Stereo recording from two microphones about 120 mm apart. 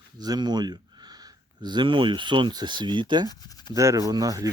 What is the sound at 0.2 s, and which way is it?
Speech, 35° right (ahead or behind).